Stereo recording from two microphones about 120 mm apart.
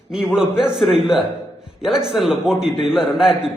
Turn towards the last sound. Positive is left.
turn(degrees=-5)  # may be behind; listen again after turning